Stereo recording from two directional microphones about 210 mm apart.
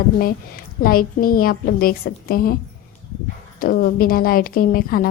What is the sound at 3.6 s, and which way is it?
A woman's voice, 45° left (ahead or behind).